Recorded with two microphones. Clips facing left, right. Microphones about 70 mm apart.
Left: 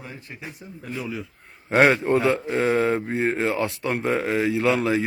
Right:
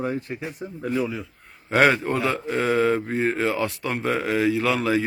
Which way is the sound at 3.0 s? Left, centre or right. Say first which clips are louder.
Even; centre.